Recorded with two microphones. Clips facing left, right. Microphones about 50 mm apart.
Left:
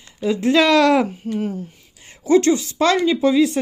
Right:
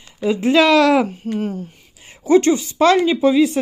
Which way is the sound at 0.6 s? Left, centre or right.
Centre.